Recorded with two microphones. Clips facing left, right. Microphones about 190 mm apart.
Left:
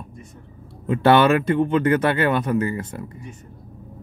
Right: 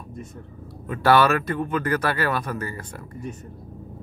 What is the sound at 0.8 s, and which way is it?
Speech, 25° left (ahead or behind).